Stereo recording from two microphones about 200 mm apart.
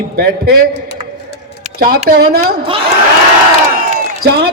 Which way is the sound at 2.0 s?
50° right (ahead or behind).